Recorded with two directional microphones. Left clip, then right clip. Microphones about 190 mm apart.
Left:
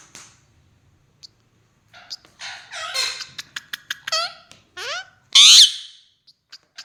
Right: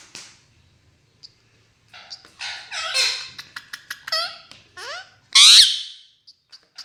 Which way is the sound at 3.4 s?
30° left (ahead or behind).